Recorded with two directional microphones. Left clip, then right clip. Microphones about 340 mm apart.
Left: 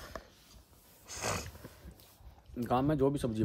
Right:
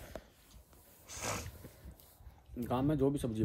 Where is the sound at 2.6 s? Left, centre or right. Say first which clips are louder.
Left 3 dB; centre.